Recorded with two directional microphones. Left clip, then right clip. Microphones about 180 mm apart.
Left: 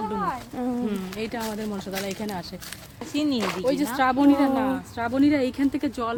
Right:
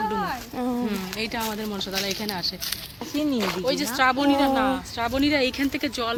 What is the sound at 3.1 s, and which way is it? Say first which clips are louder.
Speech: even; 25° right (ahead or behind).